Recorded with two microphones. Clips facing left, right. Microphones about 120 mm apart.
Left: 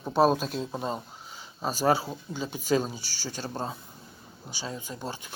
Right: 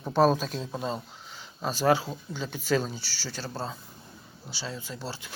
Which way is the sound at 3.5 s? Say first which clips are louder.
Left 1 dB; 15° left (ahead or behind).